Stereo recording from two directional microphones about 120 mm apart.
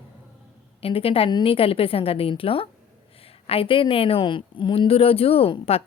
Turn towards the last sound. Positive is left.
turn(degrees=55)  # may be behind; listen again after turning